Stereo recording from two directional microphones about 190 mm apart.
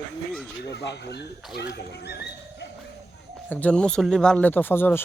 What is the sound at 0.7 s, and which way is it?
Speech, 65° left (ahead or behind).